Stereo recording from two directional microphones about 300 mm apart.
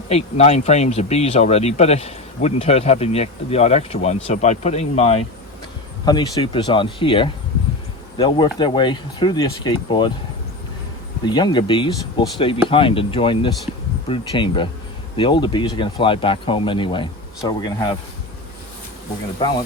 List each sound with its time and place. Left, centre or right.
0.1 s speech: centre
11.3 s speech: centre